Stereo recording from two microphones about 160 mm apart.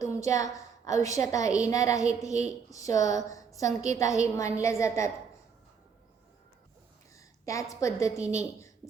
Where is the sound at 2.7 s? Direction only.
20° left (ahead or behind).